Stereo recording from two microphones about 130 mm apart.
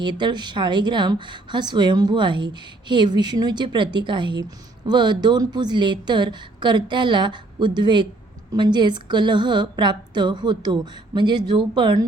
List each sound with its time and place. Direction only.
0.0 s speech: 35° right (ahead or behind)